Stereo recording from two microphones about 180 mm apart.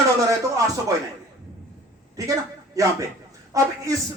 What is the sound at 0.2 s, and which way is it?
Speech, 20° right (ahead or behind).